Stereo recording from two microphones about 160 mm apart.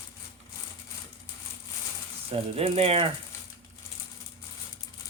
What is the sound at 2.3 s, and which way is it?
Speech, 40° right (ahead or behind).